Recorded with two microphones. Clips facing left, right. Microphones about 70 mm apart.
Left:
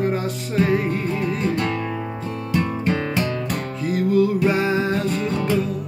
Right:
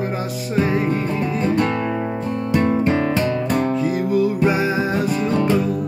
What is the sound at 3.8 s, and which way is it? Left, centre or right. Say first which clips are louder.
Music: even; centre.